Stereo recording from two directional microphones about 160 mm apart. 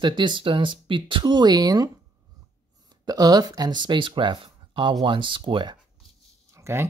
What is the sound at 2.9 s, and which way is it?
Speech, 25° right (ahead or behind).